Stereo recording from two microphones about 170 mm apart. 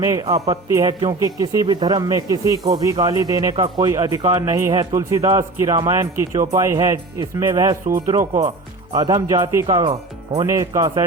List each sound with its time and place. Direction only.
0.0 s speech: 20° right (ahead or behind)
9.6 s speech: 30° right (ahead or behind)
10.4 s speech: 20° right (ahead or behind)